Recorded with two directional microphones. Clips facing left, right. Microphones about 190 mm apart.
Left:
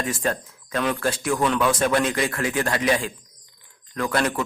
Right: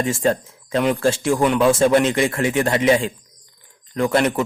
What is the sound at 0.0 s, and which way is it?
A man's voice, 25° right (ahead or behind).